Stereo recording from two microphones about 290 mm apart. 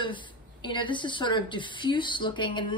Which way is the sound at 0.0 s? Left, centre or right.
Centre.